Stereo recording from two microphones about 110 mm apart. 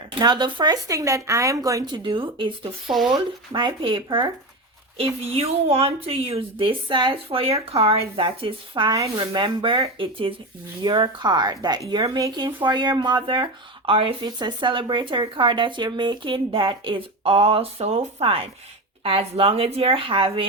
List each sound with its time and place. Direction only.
0.1 s a woman's voice: 45° right (ahead or behind)
2.0 s speech: 50° right (ahead or behind)
2.9 s speech: centre (ahead or behind)
3.5 s speech: 50° right (ahead or behind)
4.9 s speech: 65° right (ahead or behind)
10.8 s a woman's voice: 40° right (ahead or behind)
14.3 s speech: 40° right (ahead or behind)